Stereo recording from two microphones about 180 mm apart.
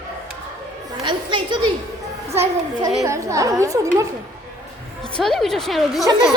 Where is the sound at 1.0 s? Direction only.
25° right (ahead or behind).